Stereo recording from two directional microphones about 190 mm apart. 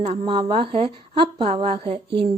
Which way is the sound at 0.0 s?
35° right (ahead or behind).